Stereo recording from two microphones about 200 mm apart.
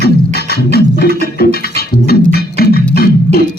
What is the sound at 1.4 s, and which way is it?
Music, 50° left (ahead or behind).